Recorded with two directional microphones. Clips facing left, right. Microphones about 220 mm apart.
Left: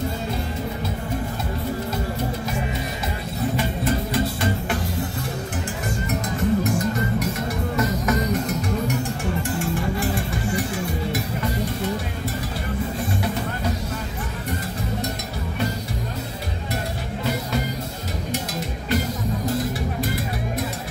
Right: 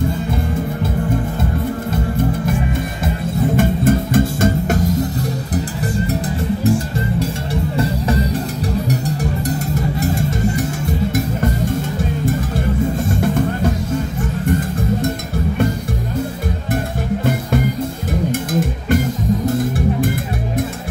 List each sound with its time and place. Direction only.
3.5 s music: 50° right (ahead or behind)
7.7 s music: 30° right (ahead or behind)
17.2 s music: 50° right (ahead or behind)